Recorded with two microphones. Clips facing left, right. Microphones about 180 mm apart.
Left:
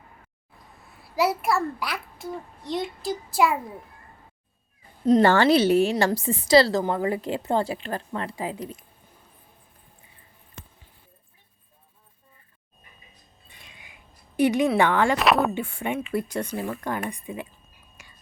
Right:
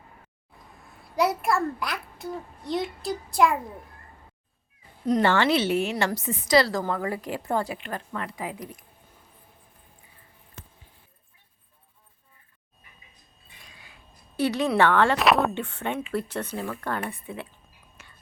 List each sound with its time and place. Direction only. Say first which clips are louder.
0.9 s a child's voice: left 1 dB; centre (ahead or behind)
5.2 s a woman's voice: left 2 dB; 40° left (ahead or behind)
13.7 s a sound: right 1 dB; 20° left (ahead or behind)
14.8 s speech: even; 15° left (ahead or behind)
15.1 s speech: even; centre (ahead or behind)
18.0 s whispering: even; 10° left (ahead or behind)